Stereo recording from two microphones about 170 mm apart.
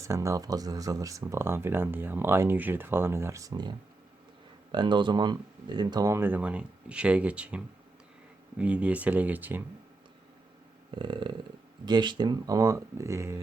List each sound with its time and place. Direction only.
0.0 s speech: 20° right (ahead or behind)
10.9 s speech: 30° right (ahead or behind)